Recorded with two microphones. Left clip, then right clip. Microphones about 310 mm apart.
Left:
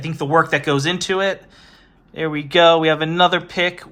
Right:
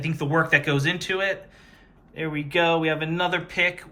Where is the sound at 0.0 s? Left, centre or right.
Centre.